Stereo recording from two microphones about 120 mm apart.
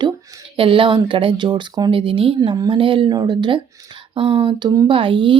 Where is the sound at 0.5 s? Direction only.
50° right (ahead or behind).